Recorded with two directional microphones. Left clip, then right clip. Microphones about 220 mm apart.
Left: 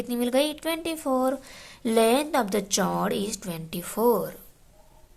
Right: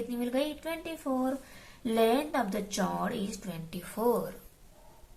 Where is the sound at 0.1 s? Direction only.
45° left (ahead or behind).